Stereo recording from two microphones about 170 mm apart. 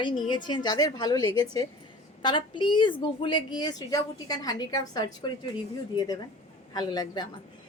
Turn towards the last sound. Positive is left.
turn(degrees=25)  # may be behind; listen again after turning